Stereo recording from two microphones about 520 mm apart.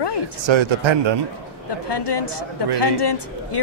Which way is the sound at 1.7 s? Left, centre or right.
Left.